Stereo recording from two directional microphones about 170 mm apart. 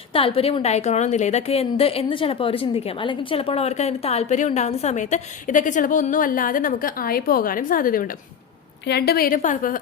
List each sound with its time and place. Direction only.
0.1 s a woman's voice: 30° left (ahead or behind); by 8.1 s 55° left (ahead or behind)
8.9 s a woman's voice: 70° left (ahead or behind); by 9.7 s 50° left (ahead or behind)